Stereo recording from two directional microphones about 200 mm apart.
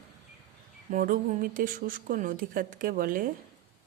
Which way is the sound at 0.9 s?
40° right (ahead or behind).